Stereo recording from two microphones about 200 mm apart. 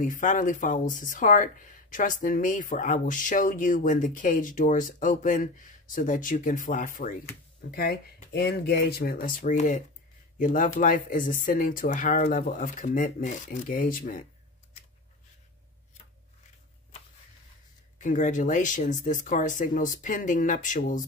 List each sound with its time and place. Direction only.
0.0 s speech: 40° left (ahead or behind)
17.9 s speech: 40° left (ahead or behind)